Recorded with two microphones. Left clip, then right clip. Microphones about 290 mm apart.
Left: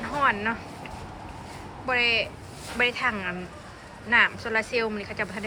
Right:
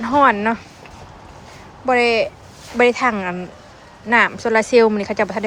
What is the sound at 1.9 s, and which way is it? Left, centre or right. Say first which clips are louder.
Speech: right 8 dB; centre.